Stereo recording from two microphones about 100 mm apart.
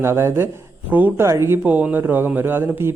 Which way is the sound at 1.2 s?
30° right (ahead or behind).